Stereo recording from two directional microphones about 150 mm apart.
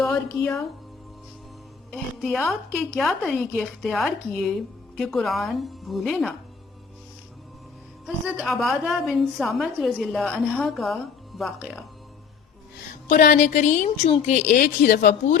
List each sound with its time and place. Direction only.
0.0 s speech: 15° left (ahead or behind)
1.9 s a woman's voice: 5° left (ahead or behind)
8.0 s a woman's voice: centre (ahead or behind)
13.1 s speech: 65° left (ahead or behind)